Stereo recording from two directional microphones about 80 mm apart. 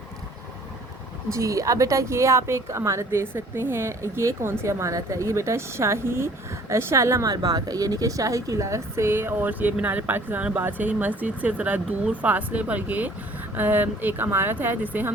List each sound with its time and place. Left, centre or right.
1.3 s a woman's voice: right